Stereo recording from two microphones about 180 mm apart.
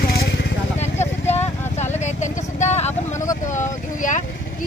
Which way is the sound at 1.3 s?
35° left (ahead or behind).